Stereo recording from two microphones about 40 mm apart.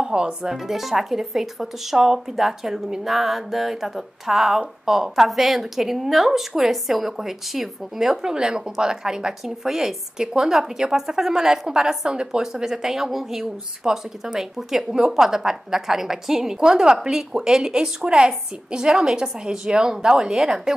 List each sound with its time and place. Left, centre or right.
0.0 s speech: right
0.5 s speech: centre